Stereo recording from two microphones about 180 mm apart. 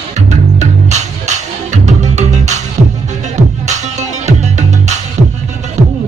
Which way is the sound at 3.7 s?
40° right (ahead or behind).